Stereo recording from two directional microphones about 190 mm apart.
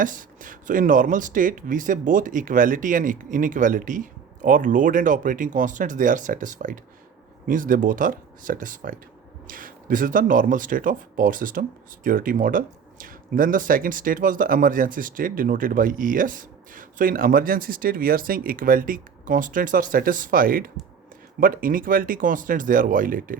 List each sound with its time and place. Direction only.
0.0 s speech: 45° right (ahead or behind)